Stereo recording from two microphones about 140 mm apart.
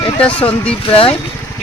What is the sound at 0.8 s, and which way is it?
Speech, 40° left (ahead or behind).